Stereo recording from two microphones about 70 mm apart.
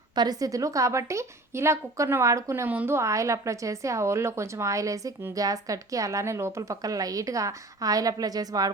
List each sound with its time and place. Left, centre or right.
0.2 s a woman's voice: right